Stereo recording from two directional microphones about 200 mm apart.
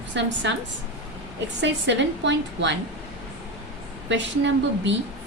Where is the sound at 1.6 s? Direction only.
65° right (ahead or behind).